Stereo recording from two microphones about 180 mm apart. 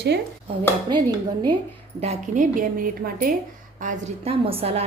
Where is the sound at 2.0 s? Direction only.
40° right (ahead or behind).